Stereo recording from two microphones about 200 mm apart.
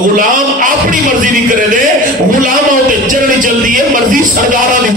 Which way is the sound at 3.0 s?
40° right (ahead or behind).